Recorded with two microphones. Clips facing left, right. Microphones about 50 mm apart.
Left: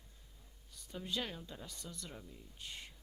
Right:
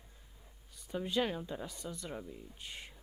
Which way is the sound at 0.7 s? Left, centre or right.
Centre.